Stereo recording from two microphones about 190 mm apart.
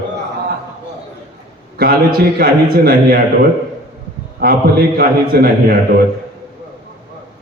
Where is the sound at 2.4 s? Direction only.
55° right (ahead or behind).